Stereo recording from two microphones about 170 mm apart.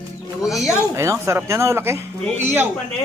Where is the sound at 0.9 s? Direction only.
15° right (ahead or behind).